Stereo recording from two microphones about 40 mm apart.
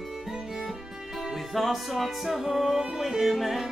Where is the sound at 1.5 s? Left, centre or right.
Centre.